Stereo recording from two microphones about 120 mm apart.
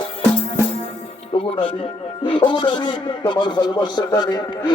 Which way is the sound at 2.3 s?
45° left (ahead or behind).